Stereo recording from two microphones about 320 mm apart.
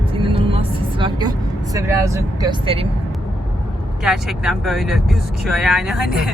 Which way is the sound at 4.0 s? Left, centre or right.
Centre.